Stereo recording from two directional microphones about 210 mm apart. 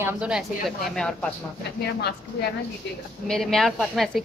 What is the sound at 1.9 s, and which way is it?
Speech, 50° left (ahead or behind).